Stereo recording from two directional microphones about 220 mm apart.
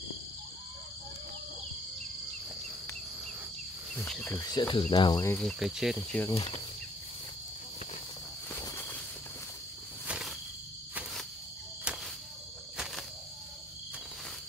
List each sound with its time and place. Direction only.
3.9 s speech: 5° left (ahead or behind); by 4.8 s 20° left (ahead or behind)
4.9 s cricket: 20° left (ahead or behind); by 6.2 s centre (ahead or behind)
6.3 s speech: 25° left (ahead or behind)
8.5 s a sound: 10° left (ahead or behind)
10.0 s insect: centre (ahead or behind)
12.7 s cricket: centre (ahead or behind)